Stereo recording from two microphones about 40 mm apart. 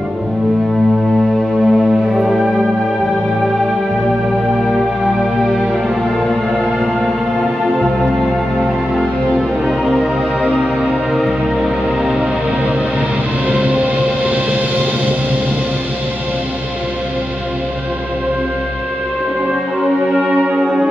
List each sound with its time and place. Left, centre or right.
1.7 s music: centre
13.5 s music: right